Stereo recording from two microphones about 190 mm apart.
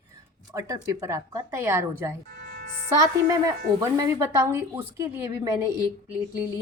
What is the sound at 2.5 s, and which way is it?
Music, 55° right (ahead or behind).